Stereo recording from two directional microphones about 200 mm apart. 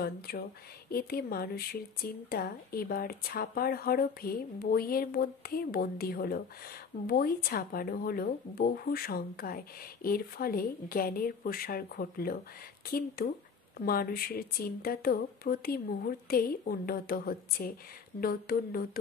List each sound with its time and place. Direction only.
0.0 s speech: 50° left (ahead or behind)